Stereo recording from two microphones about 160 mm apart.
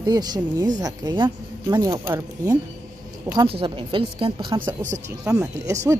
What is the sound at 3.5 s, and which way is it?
A woman's voice, 35° right (ahead or behind).